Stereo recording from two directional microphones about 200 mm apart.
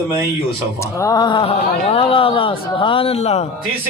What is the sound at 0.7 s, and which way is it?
A man's voice, 15° left (ahead or behind).